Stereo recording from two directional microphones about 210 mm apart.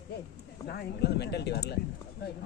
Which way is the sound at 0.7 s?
50° left (ahead or behind).